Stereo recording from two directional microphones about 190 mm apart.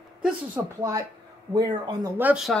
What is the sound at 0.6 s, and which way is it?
Speech, 10° right (ahead or behind).